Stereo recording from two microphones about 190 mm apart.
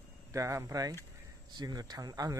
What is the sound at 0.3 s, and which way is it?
Speech, 15° right (ahead or behind).